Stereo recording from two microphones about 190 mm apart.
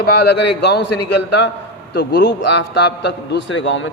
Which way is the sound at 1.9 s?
60° left (ahead or behind).